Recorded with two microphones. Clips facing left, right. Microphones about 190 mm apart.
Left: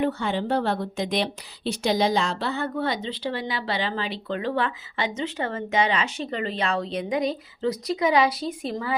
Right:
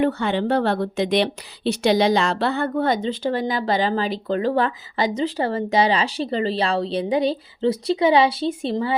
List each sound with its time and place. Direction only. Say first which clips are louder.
0.0 s a woman's voice: right 4 dB; 70° right (ahead or behind); by 8.9 s 25° right (ahead or behind)